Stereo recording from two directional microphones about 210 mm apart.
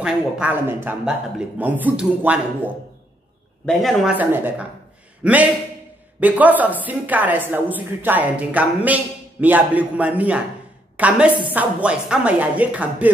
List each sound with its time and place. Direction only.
0.0 s speech: 5° right (ahead or behind)